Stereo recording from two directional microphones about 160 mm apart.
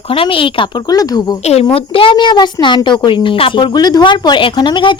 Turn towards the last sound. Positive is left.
turn(degrees=30)  # may be behind; listen again after turning